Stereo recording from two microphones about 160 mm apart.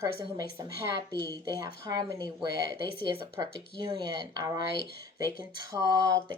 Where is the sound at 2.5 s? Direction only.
70° left (ahead or behind).